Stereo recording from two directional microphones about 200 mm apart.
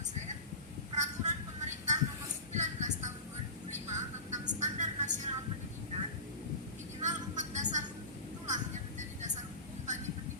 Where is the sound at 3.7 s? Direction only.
35° right (ahead or behind).